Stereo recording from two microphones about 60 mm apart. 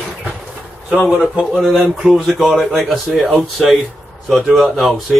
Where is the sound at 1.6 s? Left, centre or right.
Right.